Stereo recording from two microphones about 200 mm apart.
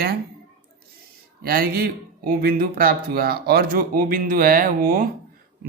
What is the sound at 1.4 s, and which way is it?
Speech, 45° right (ahead or behind).